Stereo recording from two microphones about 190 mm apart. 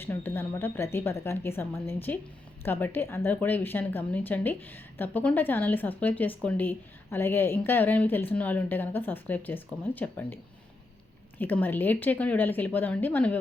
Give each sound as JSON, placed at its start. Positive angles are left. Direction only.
{"t": 0.0, "sound": "a woman's voice", "side_deg": 10}